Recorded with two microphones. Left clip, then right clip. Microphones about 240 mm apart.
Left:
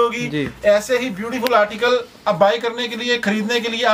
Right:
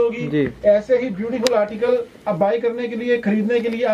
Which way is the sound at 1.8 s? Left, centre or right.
Left.